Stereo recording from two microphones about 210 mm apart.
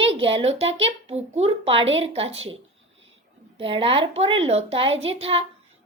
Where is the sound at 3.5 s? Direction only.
25° right (ahead or behind).